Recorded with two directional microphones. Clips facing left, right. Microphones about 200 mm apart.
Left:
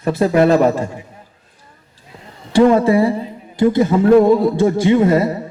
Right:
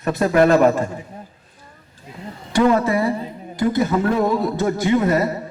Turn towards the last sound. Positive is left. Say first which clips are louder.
# left 5 dB
turn(degrees=30)  # may be behind; listen again after turning